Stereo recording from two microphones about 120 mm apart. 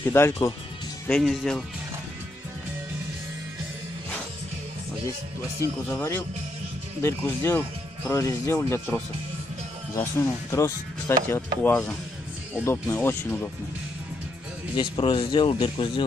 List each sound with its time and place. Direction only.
0.0 s speech: 20° left (ahead or behind)
1.0 s speech: 5° left (ahead or behind)
5.6 s speech: 20° left (ahead or behind)
8.1 s speech: 30° left (ahead or behind)
10.5 s speech: 25° left (ahead or behind)
14.8 s speech: 45° left (ahead or behind)